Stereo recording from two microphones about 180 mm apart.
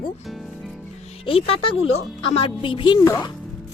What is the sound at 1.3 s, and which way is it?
Speech, 30° left (ahead or behind).